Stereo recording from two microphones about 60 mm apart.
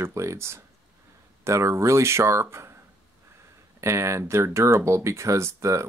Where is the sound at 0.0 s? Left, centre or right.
Right.